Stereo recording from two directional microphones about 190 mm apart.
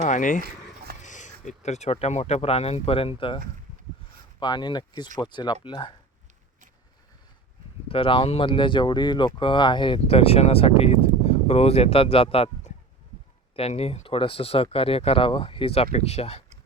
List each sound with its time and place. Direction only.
0.0 s speech: 40° left (ahead or behind); by 5.9 s 25° left (ahead or behind)
7.9 s speech: 30° left (ahead or behind)